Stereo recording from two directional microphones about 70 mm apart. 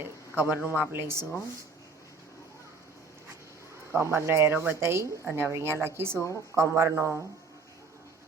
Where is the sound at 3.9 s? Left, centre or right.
Right.